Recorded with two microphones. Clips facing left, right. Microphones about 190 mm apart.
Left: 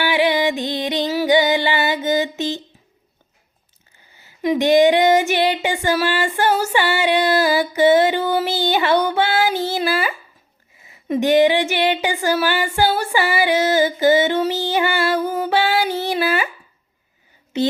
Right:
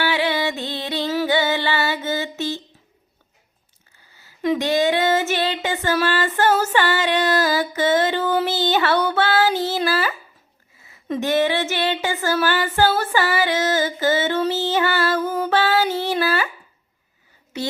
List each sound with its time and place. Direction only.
0.0 s music: 15° left (ahead or behind)
4.1 s a sound: 15° left (ahead or behind)
17.5 s a woman's voice: 20° left (ahead or behind)